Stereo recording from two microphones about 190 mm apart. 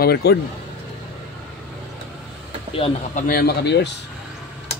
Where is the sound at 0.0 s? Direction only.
55° left (ahead or behind).